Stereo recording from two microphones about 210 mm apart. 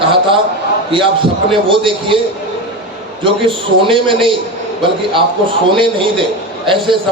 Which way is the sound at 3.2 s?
25° right (ahead or behind).